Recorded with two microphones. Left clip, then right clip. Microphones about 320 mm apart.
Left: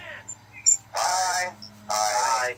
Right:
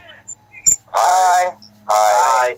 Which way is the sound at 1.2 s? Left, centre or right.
Centre.